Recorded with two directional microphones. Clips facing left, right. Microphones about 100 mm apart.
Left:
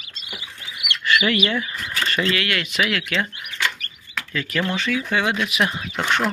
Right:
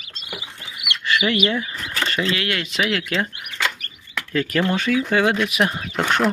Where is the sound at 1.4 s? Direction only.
25° right (ahead or behind).